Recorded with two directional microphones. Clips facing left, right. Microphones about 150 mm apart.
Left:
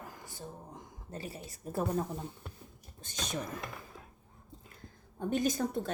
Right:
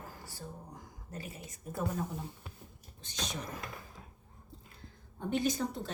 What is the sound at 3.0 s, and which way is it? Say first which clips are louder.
Speech: left 2 dB; 50° left (ahead or behind).